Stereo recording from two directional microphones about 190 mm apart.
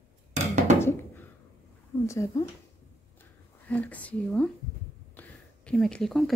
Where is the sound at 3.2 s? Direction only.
10° left (ahead or behind).